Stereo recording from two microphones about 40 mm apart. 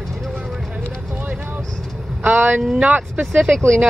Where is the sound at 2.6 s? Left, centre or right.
Centre.